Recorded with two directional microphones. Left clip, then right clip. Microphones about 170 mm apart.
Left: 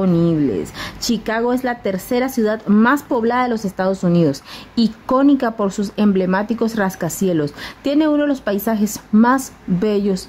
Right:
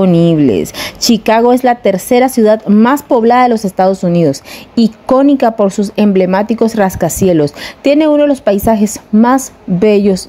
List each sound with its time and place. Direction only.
0.0 s a woman's voice: 35° right (ahead or behind)